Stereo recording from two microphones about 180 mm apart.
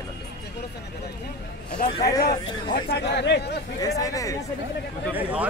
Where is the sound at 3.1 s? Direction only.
70° left (ahead or behind).